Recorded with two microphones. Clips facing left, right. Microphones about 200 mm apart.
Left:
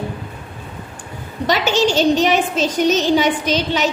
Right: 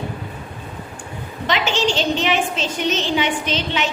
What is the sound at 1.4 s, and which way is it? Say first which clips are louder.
A woman's voice: left 4 dB; 40° left (ahead or behind).